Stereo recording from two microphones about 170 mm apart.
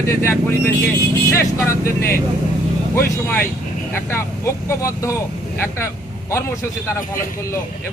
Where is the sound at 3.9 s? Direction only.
15° left (ahead or behind).